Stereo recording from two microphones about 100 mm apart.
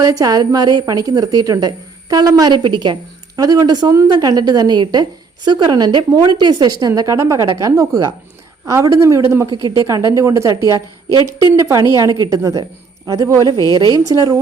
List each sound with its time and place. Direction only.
0.0 s a woman's voice: 35° right (ahead or behind)